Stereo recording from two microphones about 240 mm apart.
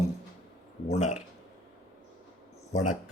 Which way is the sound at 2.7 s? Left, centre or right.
Left.